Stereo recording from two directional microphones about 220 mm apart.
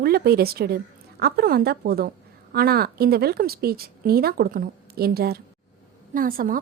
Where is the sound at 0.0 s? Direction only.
45° right (ahead or behind).